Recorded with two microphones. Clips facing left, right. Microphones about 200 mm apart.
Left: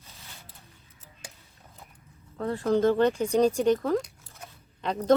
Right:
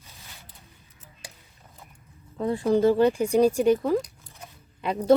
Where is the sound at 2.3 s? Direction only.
15° right (ahead or behind).